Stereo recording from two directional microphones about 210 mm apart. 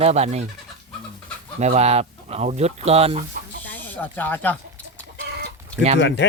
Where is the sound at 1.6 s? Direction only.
30° right (ahead or behind).